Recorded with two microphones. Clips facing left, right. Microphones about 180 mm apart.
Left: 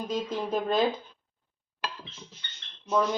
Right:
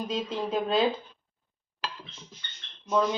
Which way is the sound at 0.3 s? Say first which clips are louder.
Right 1 dB; 5° right (ahead or behind).